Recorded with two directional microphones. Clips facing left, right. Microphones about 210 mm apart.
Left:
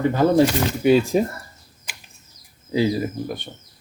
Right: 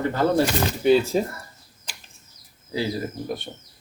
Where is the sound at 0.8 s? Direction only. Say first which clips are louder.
Left 2 dB; 15° left (ahead or behind).